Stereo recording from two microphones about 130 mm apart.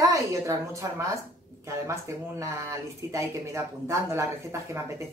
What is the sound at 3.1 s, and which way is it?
Speech, 20° right (ahead or behind).